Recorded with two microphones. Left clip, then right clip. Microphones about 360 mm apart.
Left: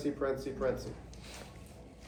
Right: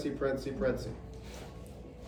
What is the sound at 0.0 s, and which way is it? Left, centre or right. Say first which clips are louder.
Speech: right 1 dB; centre.